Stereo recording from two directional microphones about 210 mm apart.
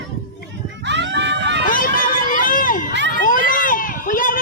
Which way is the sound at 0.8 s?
55° right (ahead or behind).